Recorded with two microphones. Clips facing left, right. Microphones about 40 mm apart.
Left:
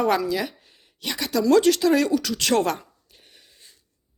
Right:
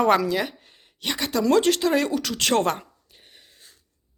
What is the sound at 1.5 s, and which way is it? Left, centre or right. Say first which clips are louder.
Speech: left 3 dB; right.